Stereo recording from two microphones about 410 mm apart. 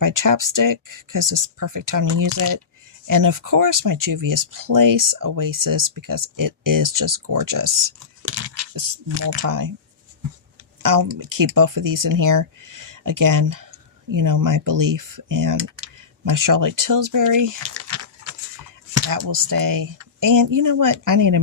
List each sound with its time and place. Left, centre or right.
0.0 s speech: right
8.2 s a sound: right
9.0 s speech: right
9.4 s speech: right
10.8 s speech: right